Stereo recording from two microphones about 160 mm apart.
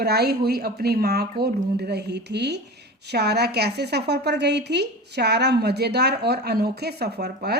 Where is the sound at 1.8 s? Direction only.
90° right.